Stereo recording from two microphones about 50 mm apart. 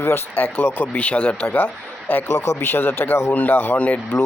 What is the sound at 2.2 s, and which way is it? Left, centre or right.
Speech, left.